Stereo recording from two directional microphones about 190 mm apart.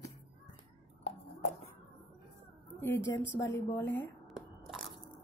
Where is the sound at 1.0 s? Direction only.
35° left (ahead or behind).